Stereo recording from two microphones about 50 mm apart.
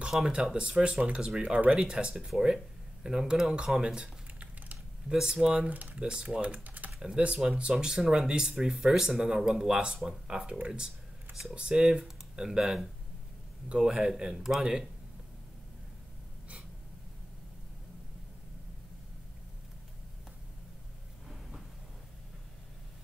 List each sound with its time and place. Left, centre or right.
0.3 s speech: centre
1.4 s speech: right
5.7 s speech: right
5.9 s speech: centre; by 6.9 s right
7.0 s speech: centre